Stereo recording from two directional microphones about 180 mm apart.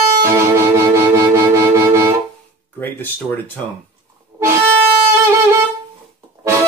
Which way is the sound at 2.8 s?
10° left (ahead or behind).